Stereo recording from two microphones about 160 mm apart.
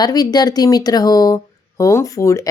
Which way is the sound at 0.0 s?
25° left (ahead or behind).